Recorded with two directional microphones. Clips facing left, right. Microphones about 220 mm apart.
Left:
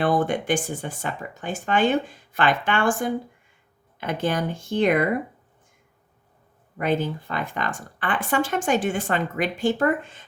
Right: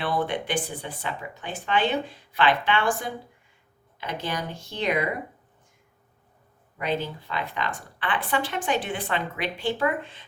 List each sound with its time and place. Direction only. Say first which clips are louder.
0.0 s speech: left 5 dB; 45° left (ahead or behind)
6.7 s speech: left 5 dB; 50° left (ahead or behind)